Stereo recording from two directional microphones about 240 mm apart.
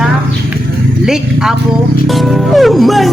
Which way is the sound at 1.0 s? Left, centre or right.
Centre.